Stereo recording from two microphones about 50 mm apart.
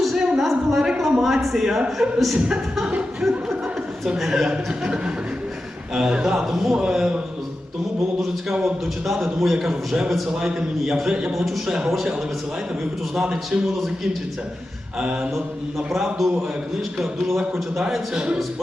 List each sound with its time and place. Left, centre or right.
0.0 s a sound: centre
1.2 s a man's voice: centre
4.8 s a man's voice: centre
8.6 s a man's voice: centre
13.2 s a man's voice: centre
13.7 s a man's voice: centre
14.9 s a man's voice: centre
15.9 s a man's voice: centre
18.1 s a man's voice: centre